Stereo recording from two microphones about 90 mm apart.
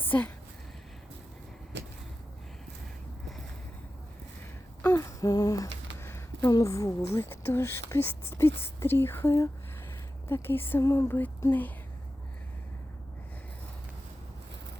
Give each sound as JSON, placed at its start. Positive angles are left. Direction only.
{"t": 0.0, "sound": "speech", "side_deg": 20}
{"t": 4.9, "sound": "humming", "side_deg": 35}
{"t": 6.5, "sound": "speech", "side_deg": 40}